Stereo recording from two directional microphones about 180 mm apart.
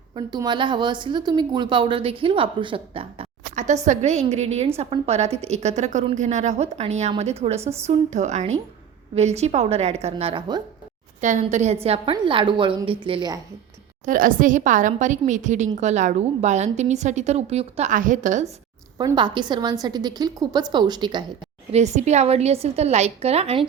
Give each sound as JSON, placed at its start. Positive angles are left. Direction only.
{"t": 0.1, "sound": "a woman's voice", "side_deg": -25}
{"t": 3.5, "sound": "a sound", "side_deg": -40}
{"t": 3.8, "sound": "a woman's voice", "side_deg": -40}
{"t": 11.2, "sound": "a woman's voice", "side_deg": -40}
{"t": 14.0, "sound": "a woman's voice", "side_deg": -50}
{"t": 18.9, "sound": "a woman's voice", "side_deg": -25}
{"t": 21.7, "sound": "a woman's voice", "side_deg": -40}